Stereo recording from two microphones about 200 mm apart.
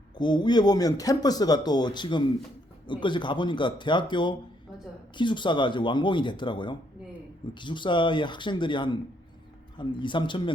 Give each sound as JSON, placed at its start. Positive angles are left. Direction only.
{"t": 0.2, "sound": "speech", "side_deg": 20}